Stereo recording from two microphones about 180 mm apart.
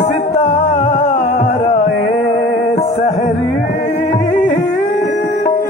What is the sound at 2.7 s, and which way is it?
Music, 40° left (ahead or behind).